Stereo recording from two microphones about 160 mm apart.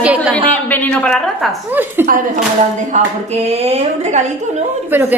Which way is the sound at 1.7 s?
10° right (ahead or behind).